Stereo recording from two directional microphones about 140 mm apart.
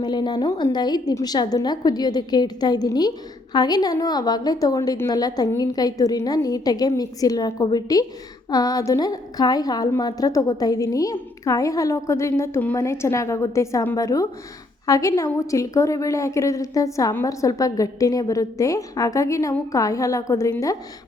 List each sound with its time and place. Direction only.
0.0 s a woman's voice: 30° left (ahead or behind)